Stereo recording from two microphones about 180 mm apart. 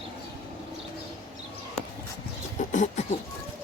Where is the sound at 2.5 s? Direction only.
45° left (ahead or behind).